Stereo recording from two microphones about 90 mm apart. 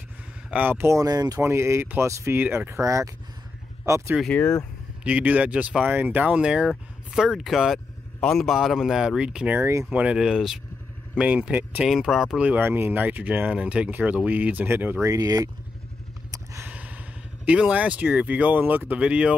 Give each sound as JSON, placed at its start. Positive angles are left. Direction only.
{"t": 0.5, "sound": "speech", "side_deg": -20}
{"t": 0.9, "sound": "speech", "side_deg": -45}
{"t": 1.4, "sound": "speech", "side_deg": -30}
{"t": 4.3, "sound": "speech", "side_deg": 20}
{"t": 5.0, "sound": "speech", "side_deg": -15}
{"t": 9.6, "sound": "speech", "side_deg": -30}
{"t": 9.8, "sound": "speech", "side_deg": -10}
{"t": 12.4, "sound": "speech", "side_deg": -20}
{"t": 15.0, "sound": "speech", "side_deg": -45}
{"t": 16.6, "sound": "a sound", "side_deg": -15}
{"t": 17.5, "sound": "speech", "side_deg": -15}